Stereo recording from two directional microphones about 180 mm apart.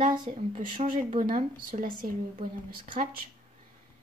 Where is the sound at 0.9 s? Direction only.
45° right (ahead or behind).